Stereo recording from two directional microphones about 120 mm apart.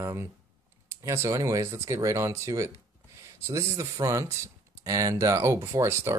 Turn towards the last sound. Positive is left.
turn(degrees=-25)  # may be behind; listen again after turning